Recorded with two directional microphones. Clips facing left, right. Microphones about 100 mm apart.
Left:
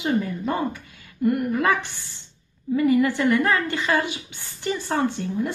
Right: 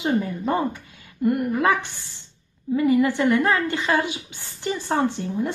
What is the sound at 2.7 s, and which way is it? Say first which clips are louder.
A woman's voice: even; 20° right (ahead or behind).